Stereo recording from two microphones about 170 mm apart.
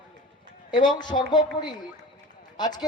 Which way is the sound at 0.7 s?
25° left (ahead or behind).